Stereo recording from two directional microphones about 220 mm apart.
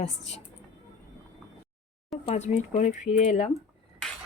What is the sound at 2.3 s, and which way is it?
Speech, 30° left (ahead or behind).